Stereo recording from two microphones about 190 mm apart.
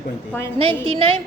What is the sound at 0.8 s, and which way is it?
Speech, 30° right (ahead or behind).